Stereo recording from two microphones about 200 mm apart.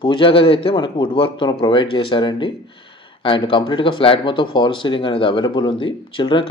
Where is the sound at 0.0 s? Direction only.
25° left (ahead or behind).